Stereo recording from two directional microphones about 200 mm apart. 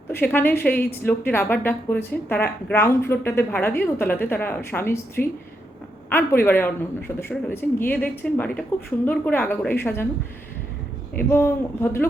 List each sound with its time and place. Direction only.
0.1 s speech: 10° left (ahead or behind)
11.2 s speech: 10° left (ahead or behind)